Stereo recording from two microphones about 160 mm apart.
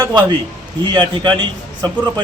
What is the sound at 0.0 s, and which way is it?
A man's voice, 30° right (ahead or behind).